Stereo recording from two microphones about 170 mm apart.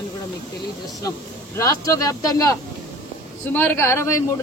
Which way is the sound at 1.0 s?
20° left (ahead or behind).